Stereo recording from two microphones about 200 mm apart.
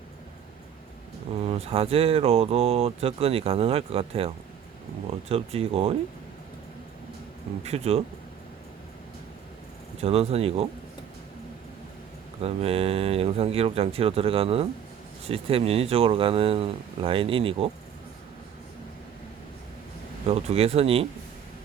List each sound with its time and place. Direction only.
1.5 s speech: 30° right (ahead or behind)
5.3 s speech: 30° right (ahead or behind)
7.6 s speech: 30° right (ahead or behind)
10.0 s speech: 30° right (ahead or behind)
12.4 s speech: 30° right (ahead or behind)
20.2 s speech: 30° right (ahead or behind)